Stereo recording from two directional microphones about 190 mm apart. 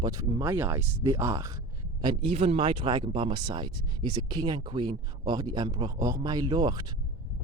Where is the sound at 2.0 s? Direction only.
25° right (ahead or behind).